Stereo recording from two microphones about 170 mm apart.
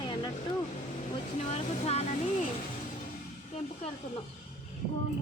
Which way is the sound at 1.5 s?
40° left (ahead or behind).